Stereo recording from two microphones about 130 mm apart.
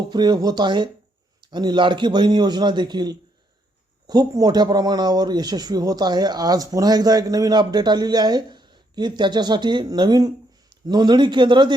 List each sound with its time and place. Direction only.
0.1 s a man's voice: 35° right (ahead or behind)